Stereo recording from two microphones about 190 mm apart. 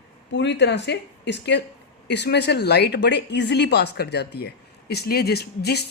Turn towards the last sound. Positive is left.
turn(degrees=60)  # may be behind; listen again after turning